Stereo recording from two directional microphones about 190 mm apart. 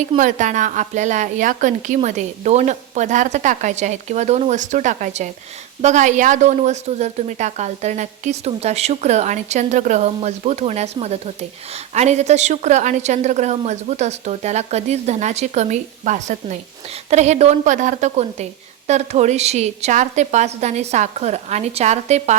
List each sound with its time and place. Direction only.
0.2 s a woman's voice: 40° right (ahead or behind)